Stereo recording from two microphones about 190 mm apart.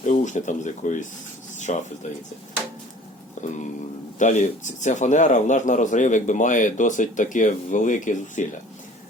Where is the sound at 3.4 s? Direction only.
40° left (ahead or behind).